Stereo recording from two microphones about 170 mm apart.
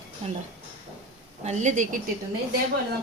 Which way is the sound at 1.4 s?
45° right (ahead or behind).